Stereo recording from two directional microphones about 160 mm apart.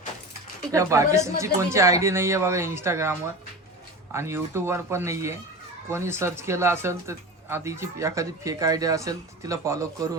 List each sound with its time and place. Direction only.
0.7 s a woman's voice: 20° right (ahead or behind)